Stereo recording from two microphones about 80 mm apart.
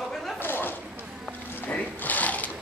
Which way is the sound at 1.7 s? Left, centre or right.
Centre.